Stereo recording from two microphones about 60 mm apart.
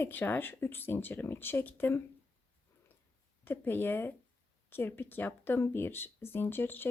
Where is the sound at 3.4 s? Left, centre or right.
Left.